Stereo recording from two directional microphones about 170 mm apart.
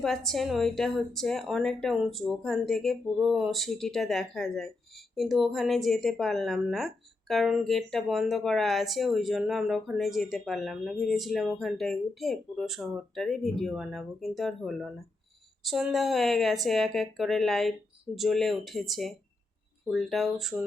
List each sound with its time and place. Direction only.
0.0 s a woman's voice: centre (ahead or behind)